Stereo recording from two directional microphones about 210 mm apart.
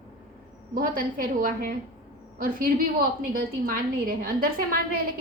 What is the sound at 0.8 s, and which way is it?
A woman's voice, 40° right (ahead or behind).